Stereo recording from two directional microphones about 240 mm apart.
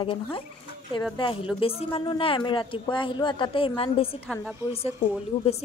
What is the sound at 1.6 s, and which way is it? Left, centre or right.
Speech, left.